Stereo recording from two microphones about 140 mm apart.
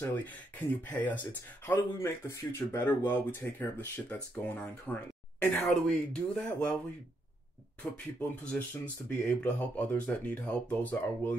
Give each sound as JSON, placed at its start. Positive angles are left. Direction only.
{"t": 0.0, "sound": "speech", "side_deg": 10}
{"t": 7.8, "sound": "speech", "side_deg": 10}